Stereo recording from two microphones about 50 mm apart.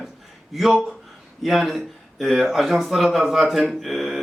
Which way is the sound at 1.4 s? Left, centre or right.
Centre.